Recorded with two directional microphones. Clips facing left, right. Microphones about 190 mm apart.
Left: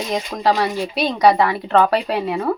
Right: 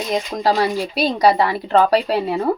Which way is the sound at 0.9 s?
35° right (ahead or behind).